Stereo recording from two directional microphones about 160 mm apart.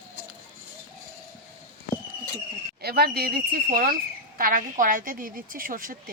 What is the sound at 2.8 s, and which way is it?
A woman's voice, 75° right (ahead or behind).